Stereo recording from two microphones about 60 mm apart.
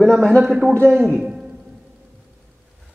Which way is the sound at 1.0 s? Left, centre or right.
Centre.